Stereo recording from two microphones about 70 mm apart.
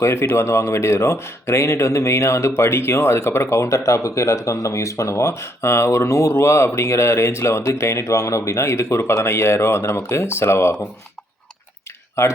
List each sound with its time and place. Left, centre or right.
0.0 s speech: left
12.2 s speech: left